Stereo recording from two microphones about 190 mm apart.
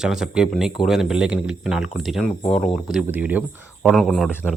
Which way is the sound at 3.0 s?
10° right (ahead or behind).